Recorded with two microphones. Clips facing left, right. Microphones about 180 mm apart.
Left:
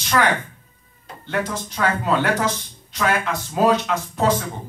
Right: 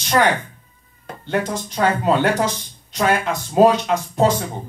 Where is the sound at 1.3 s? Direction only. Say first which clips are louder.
Right 3 dB; 30° right (ahead or behind).